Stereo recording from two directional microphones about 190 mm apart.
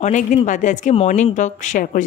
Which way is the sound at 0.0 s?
40° left (ahead or behind).